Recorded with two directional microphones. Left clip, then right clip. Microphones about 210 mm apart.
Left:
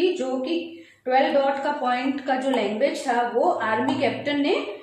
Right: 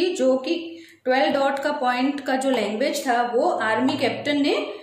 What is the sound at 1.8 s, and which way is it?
Speech, 55° right (ahead or behind).